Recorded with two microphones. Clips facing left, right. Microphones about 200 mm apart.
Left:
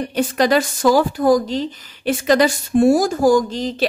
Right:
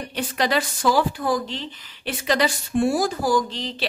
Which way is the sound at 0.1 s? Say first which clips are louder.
Left 7 dB; 45° left (ahead or behind).